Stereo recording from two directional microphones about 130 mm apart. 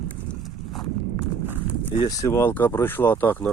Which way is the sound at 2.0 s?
25° left (ahead or behind).